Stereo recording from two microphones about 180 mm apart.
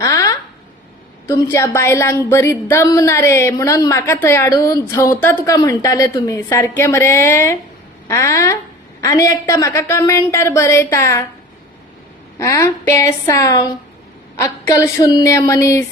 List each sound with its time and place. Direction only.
0.0 s a sound: 20° left (ahead or behind)
1.3 s a woman's voice: 15° left (ahead or behind)
12.4 s a woman's voice: 15° left (ahead or behind)